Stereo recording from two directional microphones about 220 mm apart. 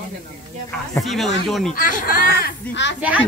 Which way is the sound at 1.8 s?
40° left (ahead or behind).